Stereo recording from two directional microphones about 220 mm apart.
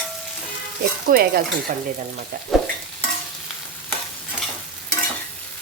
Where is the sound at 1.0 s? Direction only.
45° right (ahead or behind).